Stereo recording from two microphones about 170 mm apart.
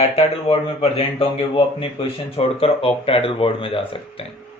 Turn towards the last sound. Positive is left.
turn(degrees=35)  # may be behind; listen again after turning